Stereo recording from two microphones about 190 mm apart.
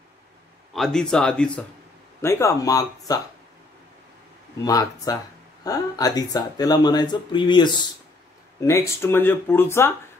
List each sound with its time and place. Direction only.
0.7 s speech: centre (ahead or behind); by 3.2 s 20° left (ahead or behind)
4.6 s speech: 20° left (ahead or behind)